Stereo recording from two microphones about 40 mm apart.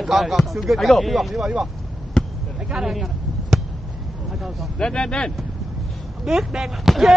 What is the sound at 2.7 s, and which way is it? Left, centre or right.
Speech, centre.